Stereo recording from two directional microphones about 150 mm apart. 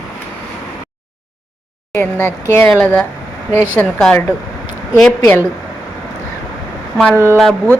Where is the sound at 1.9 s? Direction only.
15° left (ahead or behind).